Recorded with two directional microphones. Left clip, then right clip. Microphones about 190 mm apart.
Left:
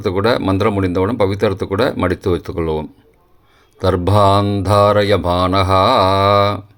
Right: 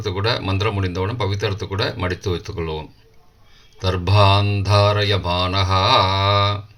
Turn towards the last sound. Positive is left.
turn(degrees=50)  # may be behind; listen again after turning